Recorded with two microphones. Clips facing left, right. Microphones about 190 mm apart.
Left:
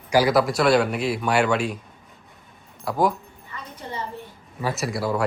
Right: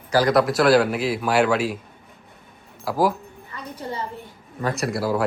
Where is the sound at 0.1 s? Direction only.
10° left (ahead or behind).